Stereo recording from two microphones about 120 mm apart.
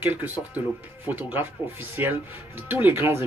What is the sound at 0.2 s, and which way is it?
Speech, 15° right (ahead or behind).